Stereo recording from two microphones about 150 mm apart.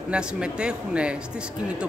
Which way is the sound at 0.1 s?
5° right (ahead or behind).